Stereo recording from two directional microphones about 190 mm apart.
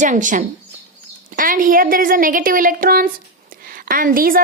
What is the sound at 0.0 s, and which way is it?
A woman's voice, 40° right (ahead or behind).